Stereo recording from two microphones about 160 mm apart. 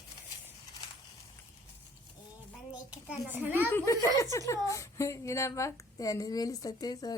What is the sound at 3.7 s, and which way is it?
Speech, 10° left (ahead or behind).